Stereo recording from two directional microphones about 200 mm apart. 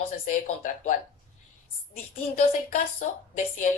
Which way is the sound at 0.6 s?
40° left (ahead or behind).